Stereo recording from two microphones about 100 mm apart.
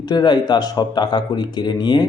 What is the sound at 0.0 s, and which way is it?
A man's voice, 45° left (ahead or behind).